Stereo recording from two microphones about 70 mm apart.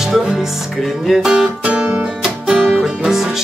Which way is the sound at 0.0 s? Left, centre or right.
Centre.